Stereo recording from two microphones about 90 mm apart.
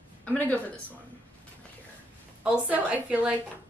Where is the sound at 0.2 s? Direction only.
15° left (ahead or behind).